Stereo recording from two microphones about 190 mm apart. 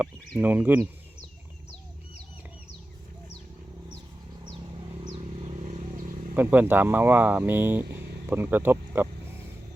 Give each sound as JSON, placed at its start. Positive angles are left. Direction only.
{"t": 0.0, "sound": "speech", "side_deg": -10}
{"t": 4.5, "sound": "vehicle", "side_deg": -30}
{"t": 6.3, "sound": "speech", "side_deg": -10}